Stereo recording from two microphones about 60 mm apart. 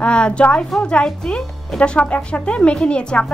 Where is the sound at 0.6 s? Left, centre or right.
Centre.